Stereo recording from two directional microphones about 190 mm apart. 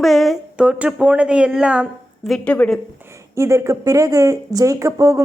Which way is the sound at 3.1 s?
15° right (ahead or behind).